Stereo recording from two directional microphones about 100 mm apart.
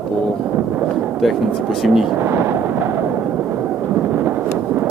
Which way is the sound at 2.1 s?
25° right (ahead or behind).